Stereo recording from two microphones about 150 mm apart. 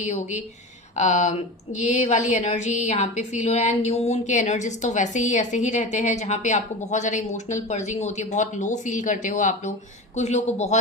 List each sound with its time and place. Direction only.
0.0 s speech: 50° left (ahead or behind)